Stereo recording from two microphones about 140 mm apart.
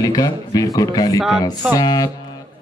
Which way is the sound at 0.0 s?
25° left (ahead or behind).